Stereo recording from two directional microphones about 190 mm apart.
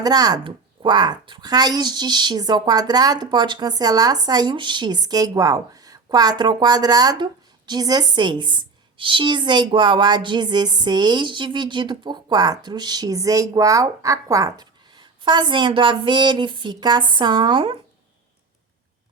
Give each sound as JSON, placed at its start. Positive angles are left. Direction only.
{"t": 0.0, "sound": "a woman's voice", "side_deg": -20}